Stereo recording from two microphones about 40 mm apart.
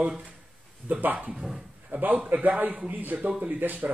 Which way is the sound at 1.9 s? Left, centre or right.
Right.